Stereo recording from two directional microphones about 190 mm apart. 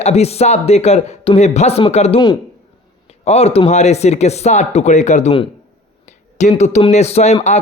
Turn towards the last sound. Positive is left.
turn(degrees=35)  # may be behind; listen again after turning